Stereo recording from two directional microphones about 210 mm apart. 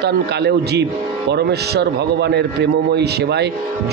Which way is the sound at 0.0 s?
55° right (ahead or behind).